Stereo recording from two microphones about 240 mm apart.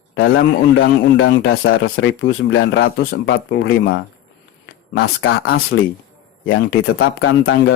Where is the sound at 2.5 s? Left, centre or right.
Left.